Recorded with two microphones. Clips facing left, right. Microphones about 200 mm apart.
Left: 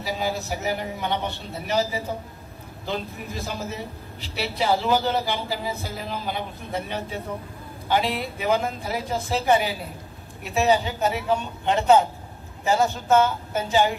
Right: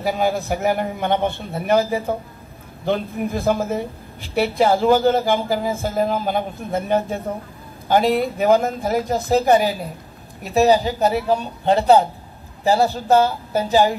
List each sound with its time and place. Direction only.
0.0 s a man's voice: 55° right (ahead or behind); by 13.9 s 35° right (ahead or behind)